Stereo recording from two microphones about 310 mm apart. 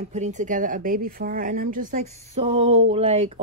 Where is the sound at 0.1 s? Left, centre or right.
Right.